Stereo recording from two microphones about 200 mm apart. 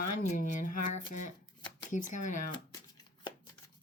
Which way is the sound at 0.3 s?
40° left (ahead or behind).